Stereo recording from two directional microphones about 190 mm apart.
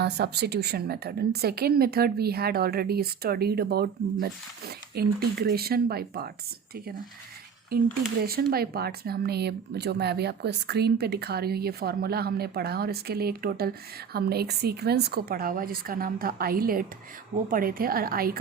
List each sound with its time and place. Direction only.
0.0 s speech: 60° right (ahead or behind)
7.7 s a woman's voice: 55° right (ahead or behind)